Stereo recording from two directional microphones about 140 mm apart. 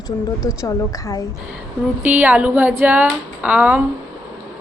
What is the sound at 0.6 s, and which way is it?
Speech, 25° left (ahead or behind).